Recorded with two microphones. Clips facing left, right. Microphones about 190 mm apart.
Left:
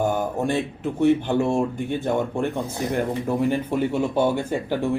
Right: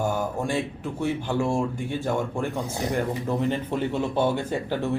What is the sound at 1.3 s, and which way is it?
Speech, 20° left (ahead or behind).